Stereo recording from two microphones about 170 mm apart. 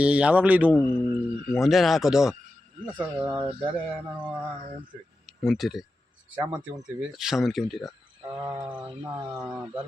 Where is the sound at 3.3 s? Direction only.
30° right (ahead or behind).